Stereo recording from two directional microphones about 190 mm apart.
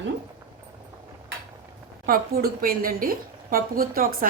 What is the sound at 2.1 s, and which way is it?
A woman's voice, 50° right (ahead or behind).